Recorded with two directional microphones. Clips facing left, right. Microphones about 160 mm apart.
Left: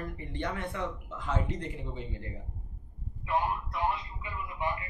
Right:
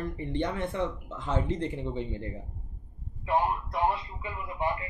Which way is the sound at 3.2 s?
35° right (ahead or behind).